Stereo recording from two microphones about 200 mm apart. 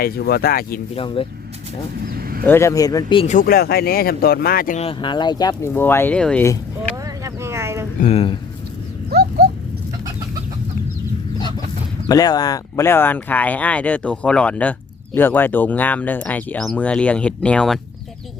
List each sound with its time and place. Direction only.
0.0 s speech: 50° left (ahead or behind)
0.9 s speech: 25° left (ahead or behind)
2.0 s a sound: 50° right (ahead or behind)
2.4 s speech: 10° left (ahead or behind)
3.2 s speech: 45° left (ahead or behind)
4.8 s speech: 25° left (ahead or behind)
6.9 s a sound: 15° right (ahead or behind)
8.0 s speech: 30° left (ahead or behind)
9.0 s a sound: 50° right (ahead or behind)
12.0 s speech: 20° left (ahead or behind)